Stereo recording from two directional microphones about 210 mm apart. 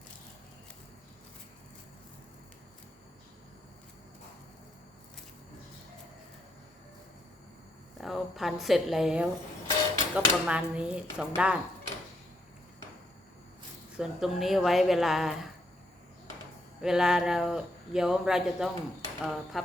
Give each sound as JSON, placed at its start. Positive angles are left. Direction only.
{"t": 8.0, "sound": "speech", "side_deg": 0}
{"t": 13.9, "sound": "speech", "side_deg": -5}
{"t": 16.8, "sound": "speech", "side_deg": 0}